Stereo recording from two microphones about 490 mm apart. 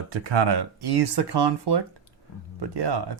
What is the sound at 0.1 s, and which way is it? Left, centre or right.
Speech, right.